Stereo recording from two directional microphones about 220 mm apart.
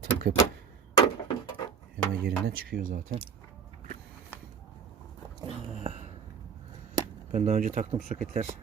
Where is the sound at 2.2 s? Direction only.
45° right (ahead or behind).